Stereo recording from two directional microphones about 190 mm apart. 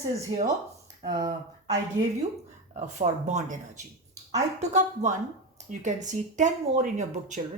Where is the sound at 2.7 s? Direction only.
40° right (ahead or behind).